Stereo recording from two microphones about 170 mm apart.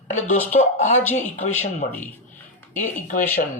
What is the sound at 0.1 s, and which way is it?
Speech, 45° left (ahead or behind).